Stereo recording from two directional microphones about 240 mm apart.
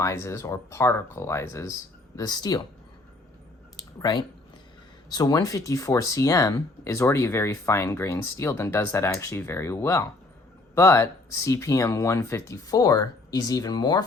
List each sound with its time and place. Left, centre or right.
0.0 s speech: centre
3.8 s a sound: centre
5.1 s speech: centre